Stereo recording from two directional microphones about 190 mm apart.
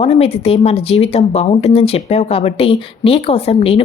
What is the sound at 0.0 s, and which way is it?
Speech, 35° left (ahead or behind).